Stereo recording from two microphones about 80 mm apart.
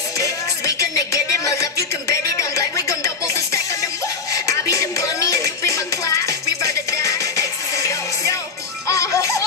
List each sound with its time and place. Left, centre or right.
0.2 s music: left